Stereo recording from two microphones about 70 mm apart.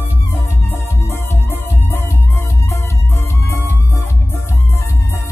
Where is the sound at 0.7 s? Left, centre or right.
Left.